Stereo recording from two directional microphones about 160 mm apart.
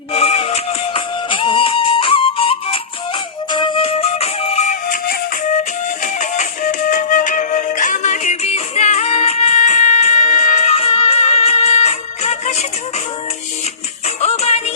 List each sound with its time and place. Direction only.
0.1 s music: 40° left (ahead or behind)
14.2 s music: 40° left (ahead or behind)